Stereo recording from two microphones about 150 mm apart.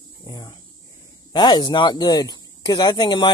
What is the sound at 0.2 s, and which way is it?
Speech, 25° left (ahead or behind).